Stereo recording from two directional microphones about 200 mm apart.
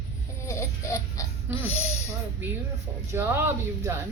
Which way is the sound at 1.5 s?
30° left (ahead or behind).